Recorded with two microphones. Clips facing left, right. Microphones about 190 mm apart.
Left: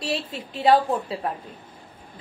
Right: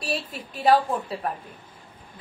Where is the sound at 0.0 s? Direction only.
25° left (ahead or behind).